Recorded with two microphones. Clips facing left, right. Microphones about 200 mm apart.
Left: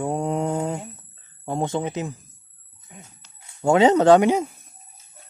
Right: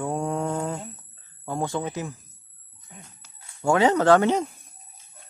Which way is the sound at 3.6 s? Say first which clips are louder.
Left 4 dB; 20° left (ahead or behind).